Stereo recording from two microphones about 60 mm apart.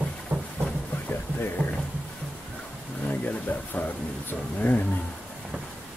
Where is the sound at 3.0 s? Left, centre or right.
Left.